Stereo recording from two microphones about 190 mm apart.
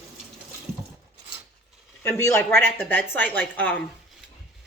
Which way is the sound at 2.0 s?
15° left (ahead or behind).